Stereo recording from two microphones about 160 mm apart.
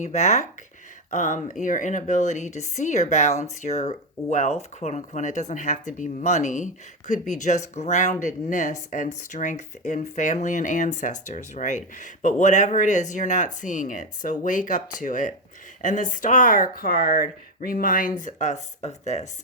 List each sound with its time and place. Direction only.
0.0 s speech: 50° left (ahead or behind)
18.2 s speech: 50° left (ahead or behind)